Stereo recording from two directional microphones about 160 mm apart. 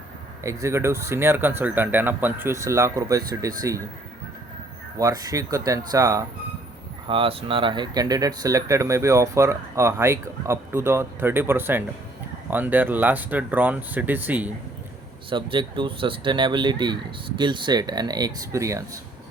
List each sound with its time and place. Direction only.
0.4 s speech: 20° right (ahead or behind)
4.9 s speech: 20° right (ahead or behind)
7.1 s speech: 35° right (ahead or behind); by 14.5 s 10° right (ahead or behind)
15.3 s speech: 30° right (ahead or behind)